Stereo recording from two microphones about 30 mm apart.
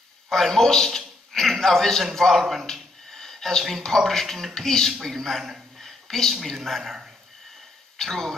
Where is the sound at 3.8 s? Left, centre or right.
Centre.